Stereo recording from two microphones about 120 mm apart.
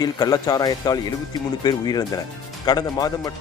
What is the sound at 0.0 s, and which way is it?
Speech, 30° left (ahead or behind).